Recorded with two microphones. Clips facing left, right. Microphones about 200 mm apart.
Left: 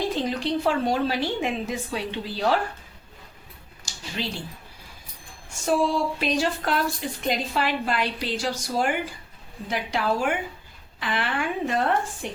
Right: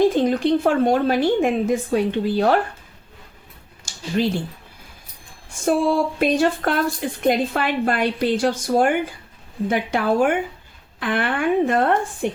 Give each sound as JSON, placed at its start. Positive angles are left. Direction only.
{"t": 0.1, "sound": "a woman's voice", "side_deg": -50}
{"t": 3.9, "sound": "a sound", "side_deg": -50}
{"t": 5.6, "sound": "a woman's voice", "side_deg": -55}